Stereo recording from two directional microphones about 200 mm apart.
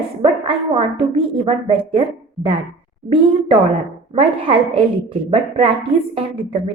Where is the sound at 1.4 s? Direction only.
25° right (ahead or behind).